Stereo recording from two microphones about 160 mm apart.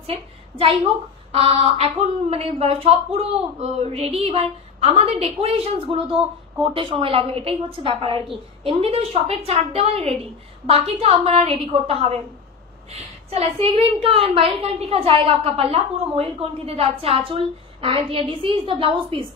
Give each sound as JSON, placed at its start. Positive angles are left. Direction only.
{"t": 0.0, "sound": "a woman's voice", "side_deg": -35}